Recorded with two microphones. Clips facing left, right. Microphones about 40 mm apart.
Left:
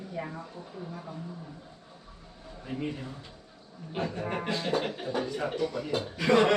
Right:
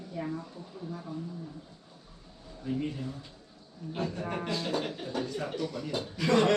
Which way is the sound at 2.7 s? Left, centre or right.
Left.